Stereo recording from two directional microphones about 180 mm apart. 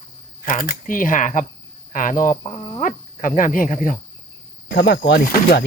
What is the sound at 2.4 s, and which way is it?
Speech, 30° left (ahead or behind).